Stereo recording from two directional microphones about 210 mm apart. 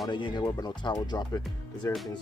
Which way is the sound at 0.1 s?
20° left (ahead or behind).